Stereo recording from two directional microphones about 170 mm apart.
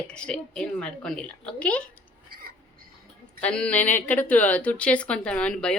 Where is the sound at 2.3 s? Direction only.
60° right (ahead or behind).